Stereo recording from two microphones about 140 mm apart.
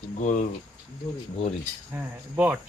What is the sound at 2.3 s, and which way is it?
Speech, 10° right (ahead or behind).